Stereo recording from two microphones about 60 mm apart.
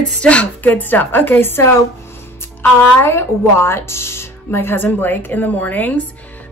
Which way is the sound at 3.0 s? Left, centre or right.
Left.